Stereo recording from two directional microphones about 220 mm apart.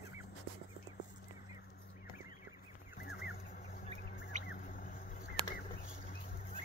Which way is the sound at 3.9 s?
45° left (ahead or behind).